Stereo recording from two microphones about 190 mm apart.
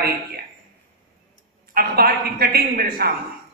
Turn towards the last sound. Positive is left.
turn(degrees=-50)  # may be behind; listen again after turning